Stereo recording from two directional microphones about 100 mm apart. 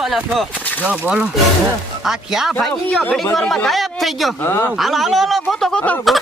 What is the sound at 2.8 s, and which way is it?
Speech, 10° left (ahead or behind).